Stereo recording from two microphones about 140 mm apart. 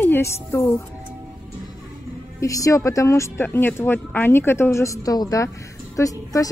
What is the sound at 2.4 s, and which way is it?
Speech, 25° left (ahead or behind).